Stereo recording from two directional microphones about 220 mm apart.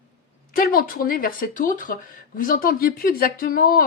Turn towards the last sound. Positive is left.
turn(degrees=40)  # may be behind; listen again after turning